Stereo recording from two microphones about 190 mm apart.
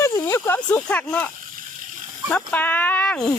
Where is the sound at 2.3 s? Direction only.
10° left (ahead or behind).